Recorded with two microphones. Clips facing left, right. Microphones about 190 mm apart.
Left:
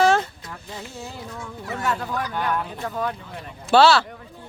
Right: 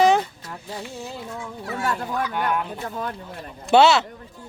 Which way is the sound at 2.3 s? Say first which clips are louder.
Right 1 dB; 10° right (ahead or behind).